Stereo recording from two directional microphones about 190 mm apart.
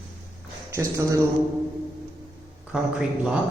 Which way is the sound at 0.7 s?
15° right (ahead or behind).